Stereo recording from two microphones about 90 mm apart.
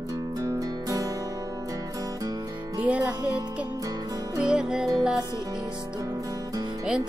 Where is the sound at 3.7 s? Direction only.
45° right (ahead or behind).